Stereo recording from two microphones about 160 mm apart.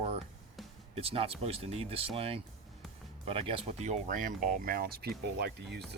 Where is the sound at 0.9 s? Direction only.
35° right (ahead or behind).